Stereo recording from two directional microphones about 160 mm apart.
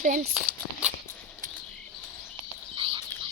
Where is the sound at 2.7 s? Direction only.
35° right (ahead or behind).